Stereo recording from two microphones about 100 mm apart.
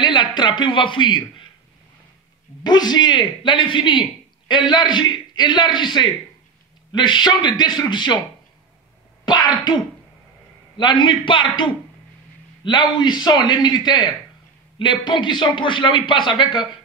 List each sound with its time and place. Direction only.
0.0 s speech: 50° left (ahead or behind)
2.6 s a man's voice: 45° left (ahead or behind)
9.2 s throat clearing: 50° left (ahead or behind)
10.8 s a man's voice: 55° left (ahead or behind)